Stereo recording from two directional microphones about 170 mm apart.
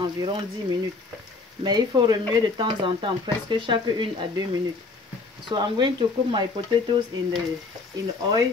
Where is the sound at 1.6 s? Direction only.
25° right (ahead or behind).